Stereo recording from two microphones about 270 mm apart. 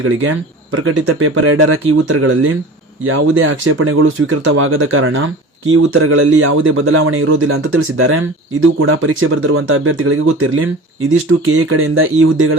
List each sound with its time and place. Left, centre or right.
0.0 s speech: right
11.7 s speech: right